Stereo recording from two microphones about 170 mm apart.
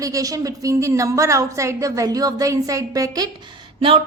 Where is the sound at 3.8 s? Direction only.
30° right (ahead or behind).